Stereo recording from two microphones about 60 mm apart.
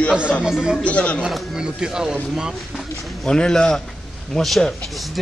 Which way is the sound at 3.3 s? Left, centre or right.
Centre.